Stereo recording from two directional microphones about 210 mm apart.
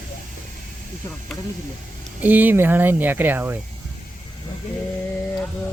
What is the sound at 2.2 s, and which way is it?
Speech, 10° right (ahead or behind).